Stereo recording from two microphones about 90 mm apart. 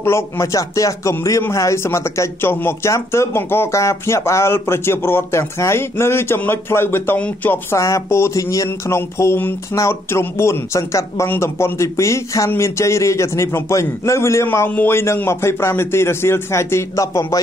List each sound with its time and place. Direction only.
0.0 s a man's voice: 30° left (ahead or behind)
7.7 s a man's voice: 35° left (ahead or behind)